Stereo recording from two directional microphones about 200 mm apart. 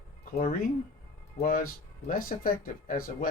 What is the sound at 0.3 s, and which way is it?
Speech, 35° left (ahead or behind).